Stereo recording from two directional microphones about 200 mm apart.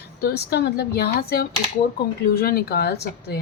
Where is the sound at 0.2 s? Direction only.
55° left (ahead or behind).